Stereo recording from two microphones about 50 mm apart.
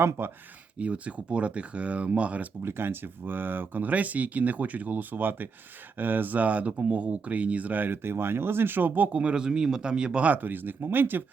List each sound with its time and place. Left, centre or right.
0.2 s speech: right
0.8 s speech: right
2.6 s speech: right
8.0 s speech: right
9.1 s speech: centre
10.2 s speech: right